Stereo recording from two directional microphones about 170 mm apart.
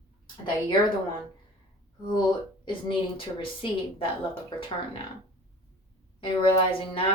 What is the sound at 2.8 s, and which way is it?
A woman's voice, 30° left (ahead or behind).